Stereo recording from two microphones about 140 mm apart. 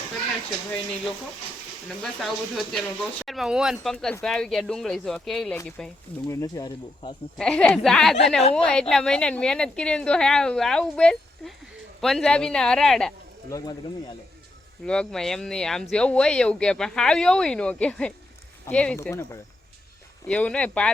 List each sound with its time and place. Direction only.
2.0 s speech: centre (ahead or behind)
3.9 s speech: 5° left (ahead or behind)
6.2 s speech: 25° left (ahead or behind)
7.3 s speech: 5° left (ahead or behind)
14.8 s speech: 5° left (ahead or behind)
18.9 s speech: 20° left (ahead or behind)
20.2 s speech: 10° left (ahead or behind)